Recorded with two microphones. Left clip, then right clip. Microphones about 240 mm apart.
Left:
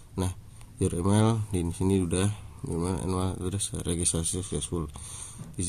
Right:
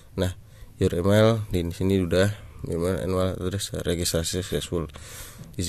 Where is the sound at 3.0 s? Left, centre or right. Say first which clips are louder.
Right 6 dB; centre.